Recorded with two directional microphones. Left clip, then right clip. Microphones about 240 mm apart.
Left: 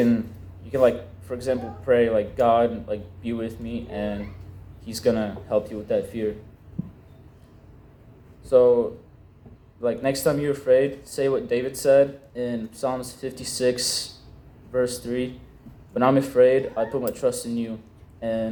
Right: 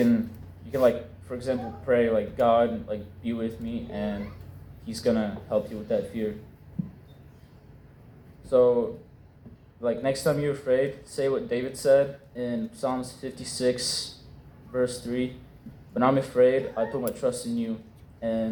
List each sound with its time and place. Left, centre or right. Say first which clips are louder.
0.7 s speech: left 3 dB; left
8.4 s speech: left 4 dB; left